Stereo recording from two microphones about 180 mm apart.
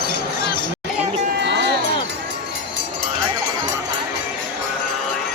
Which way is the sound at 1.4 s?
75° right (ahead or behind).